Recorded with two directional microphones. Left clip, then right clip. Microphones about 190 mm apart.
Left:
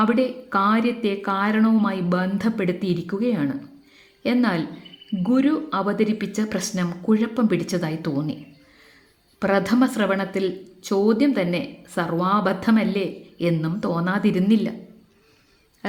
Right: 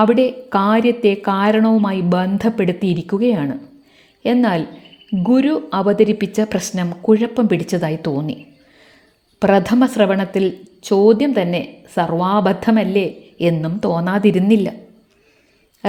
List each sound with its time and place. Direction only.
0.0 s a woman's voice: 30° right (ahead or behind)
9.4 s speech: 30° right (ahead or behind)
15.8 s speech: 35° right (ahead or behind)